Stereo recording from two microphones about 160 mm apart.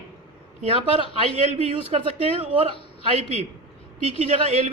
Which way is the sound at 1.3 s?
40° right (ahead or behind).